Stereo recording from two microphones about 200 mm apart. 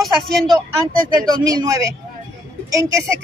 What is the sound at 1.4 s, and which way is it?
Speech, 15° right (ahead or behind).